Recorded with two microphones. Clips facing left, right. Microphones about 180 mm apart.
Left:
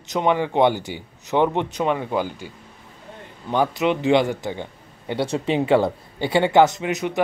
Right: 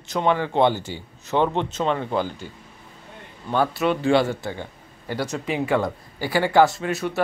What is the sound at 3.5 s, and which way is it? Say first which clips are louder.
Speech: left 1 dB; 15° left (ahead or behind).